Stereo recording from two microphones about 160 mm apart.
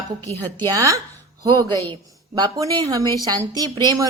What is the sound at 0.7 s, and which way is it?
A woman's voice, 20° right (ahead or behind).